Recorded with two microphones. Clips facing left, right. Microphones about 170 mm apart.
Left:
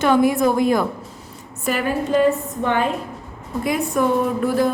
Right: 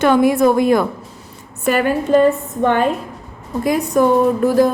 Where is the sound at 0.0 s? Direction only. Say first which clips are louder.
Right 3 dB; 65° right (ahead or behind).